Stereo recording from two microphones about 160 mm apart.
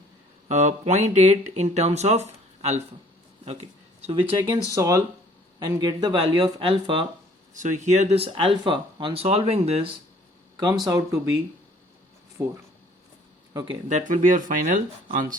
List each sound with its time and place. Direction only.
0.4 s speech: 45° right (ahead or behind)
4.7 s speech: 20° right (ahead or behind)
7.5 s speech: 50° right (ahead or behind)
10.6 s speech: 25° right (ahead or behind)
12.4 s speech: 15° right (ahead or behind)
13.5 s speech: 25° right (ahead or behind)
13.8 s speech: 50° right (ahead or behind)